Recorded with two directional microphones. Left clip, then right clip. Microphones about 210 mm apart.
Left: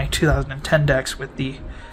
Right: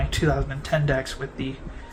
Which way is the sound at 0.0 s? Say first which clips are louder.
Left 4 dB; 55° left (ahead or behind).